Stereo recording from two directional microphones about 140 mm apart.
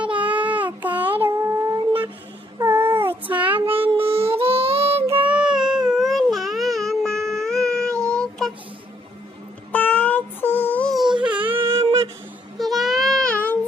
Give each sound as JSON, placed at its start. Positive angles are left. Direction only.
{"t": 0.0, "sound": "child singing", "side_deg": -10}
{"t": 3.5, "sound": "child singing", "side_deg": -40}
{"t": 5.2, "sound": "baby cry", "side_deg": -5}
{"t": 9.7, "sound": "synthetic singing", "side_deg": 10}
{"t": 11.3, "sound": "a sound", "side_deg": -10}
{"t": 12.5, "sound": "music", "side_deg": 0}